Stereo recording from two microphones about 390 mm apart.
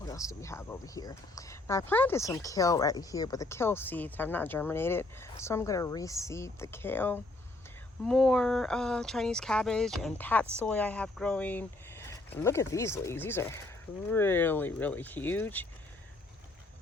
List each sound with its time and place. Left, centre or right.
0.0 s speech: centre